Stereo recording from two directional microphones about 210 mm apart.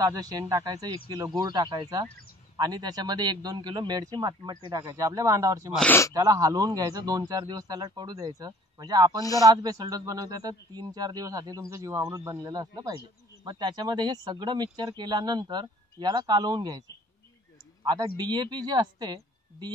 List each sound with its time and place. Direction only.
0.0 s a man's voice: 20° right (ahead or behind)
5.8 s speech: 10° left (ahead or behind)
6.1 s a man's voice: 15° right (ahead or behind)
17.8 s a man's voice: 20° right (ahead or behind)